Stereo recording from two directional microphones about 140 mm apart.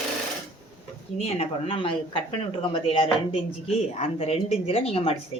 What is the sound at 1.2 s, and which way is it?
Speech, 45° left (ahead or behind).